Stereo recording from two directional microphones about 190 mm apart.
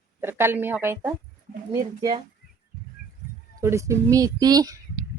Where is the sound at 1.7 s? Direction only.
20° right (ahead or behind).